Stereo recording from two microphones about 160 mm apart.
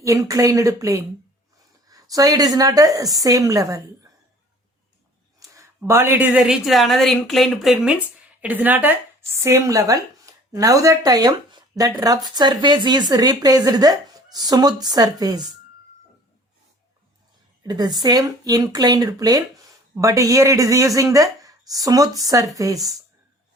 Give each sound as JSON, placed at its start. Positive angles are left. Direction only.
{"t": 0.0, "sound": "speech", "side_deg": -20}
{"t": 5.4, "sound": "a woman's voice", "side_deg": -20}
{"t": 17.6, "sound": "speech", "side_deg": -25}